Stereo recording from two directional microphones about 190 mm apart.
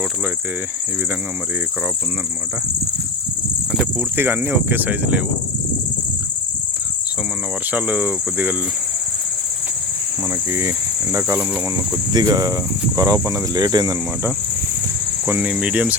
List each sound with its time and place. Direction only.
3.7 s speech: 5° right (ahead or behind)
7.7 s speech: 10° right (ahead or behind)
10.2 s speech: 15° right (ahead or behind)
11.7 s speech: 20° right (ahead or behind)
15.3 s speech: 10° right (ahead or behind)